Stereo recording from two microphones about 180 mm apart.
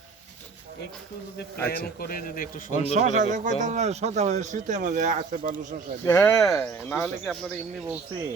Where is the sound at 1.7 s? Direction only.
55° left (ahead or behind).